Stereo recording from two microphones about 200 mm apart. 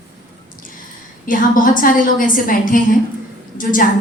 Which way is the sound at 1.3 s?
45° left (ahead or behind).